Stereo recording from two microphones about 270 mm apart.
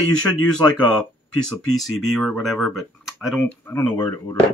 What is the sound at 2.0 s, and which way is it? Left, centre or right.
Speech, centre.